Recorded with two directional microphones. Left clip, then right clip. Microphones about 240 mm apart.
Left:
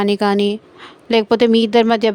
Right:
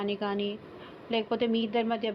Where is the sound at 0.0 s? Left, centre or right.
Left.